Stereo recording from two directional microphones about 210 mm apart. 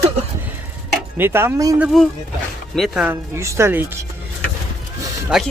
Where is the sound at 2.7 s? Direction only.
Centre (ahead or behind).